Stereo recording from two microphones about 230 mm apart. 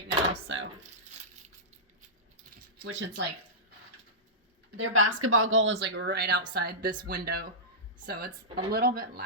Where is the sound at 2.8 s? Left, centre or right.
Right.